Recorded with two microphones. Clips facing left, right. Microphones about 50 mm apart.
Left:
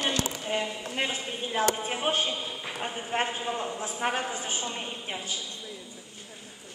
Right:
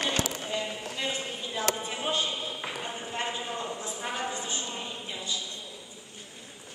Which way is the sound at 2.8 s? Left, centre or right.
Left.